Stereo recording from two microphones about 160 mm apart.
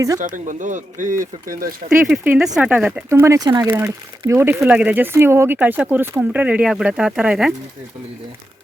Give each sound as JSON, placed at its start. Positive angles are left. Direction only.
{"t": 0.2, "sound": "speech", "side_deg": -55}
{"t": 2.0, "sound": "speech", "side_deg": -5}